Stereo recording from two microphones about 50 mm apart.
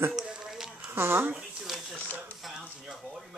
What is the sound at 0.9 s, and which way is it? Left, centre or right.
Speech, right.